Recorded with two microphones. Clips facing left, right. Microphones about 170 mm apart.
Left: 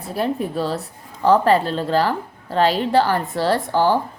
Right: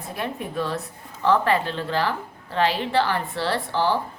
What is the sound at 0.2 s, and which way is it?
A woman's voice, 35° left (ahead or behind).